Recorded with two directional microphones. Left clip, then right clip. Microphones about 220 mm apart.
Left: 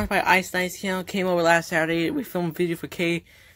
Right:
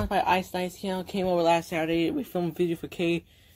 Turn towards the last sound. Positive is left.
turn(degrees=35)  # may be behind; listen again after turning